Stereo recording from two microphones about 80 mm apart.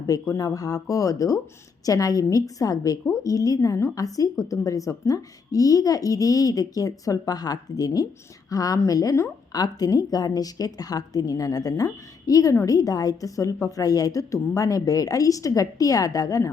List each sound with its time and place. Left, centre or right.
0.1 s a woman's voice: left